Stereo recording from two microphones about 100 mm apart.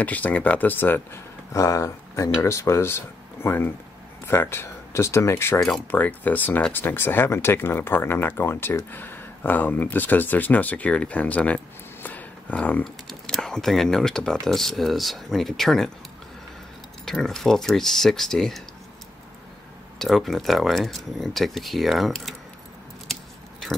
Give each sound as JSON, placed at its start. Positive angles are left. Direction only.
{"t": 0.0, "sound": "speech", "side_deg": 15}
{"t": 12.8, "sound": "speech", "side_deg": 5}
{"t": 17.0, "sound": "speech", "side_deg": 5}
{"t": 20.0, "sound": "speech", "side_deg": 0}